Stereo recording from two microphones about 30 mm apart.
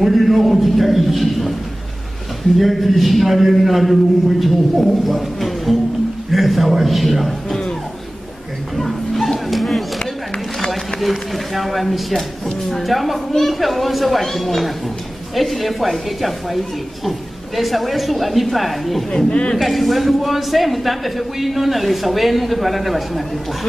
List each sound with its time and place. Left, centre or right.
0.0 s speech: centre
2.5 s speech: centre
8.7 s a sound: centre
11.0 s speech: centre
19.1 s speech: left
19.5 s speech: centre